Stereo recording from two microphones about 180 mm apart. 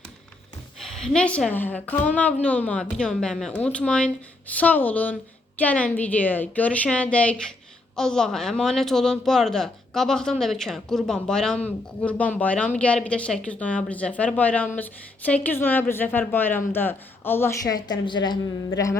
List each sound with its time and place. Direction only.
0.8 s speech: 5° left (ahead or behind); by 18.9 s 20° left (ahead or behind)